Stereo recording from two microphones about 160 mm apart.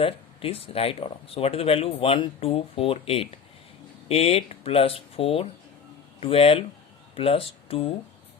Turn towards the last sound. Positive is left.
turn(degrees=35)  # may be behind; listen again after turning